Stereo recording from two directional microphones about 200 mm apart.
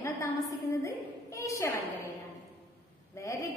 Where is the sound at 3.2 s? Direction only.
15° left (ahead or behind).